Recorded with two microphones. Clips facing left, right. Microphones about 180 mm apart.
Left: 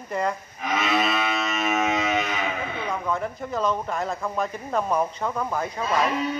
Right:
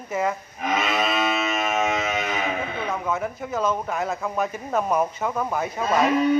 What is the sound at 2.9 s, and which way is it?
Speech, 5° right (ahead or behind).